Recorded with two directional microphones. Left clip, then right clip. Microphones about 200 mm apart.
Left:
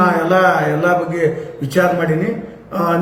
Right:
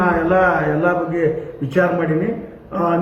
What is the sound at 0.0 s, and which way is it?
A man's voice, 15° left (ahead or behind).